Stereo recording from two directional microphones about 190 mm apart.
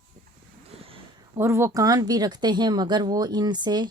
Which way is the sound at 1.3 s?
15° right (ahead or behind).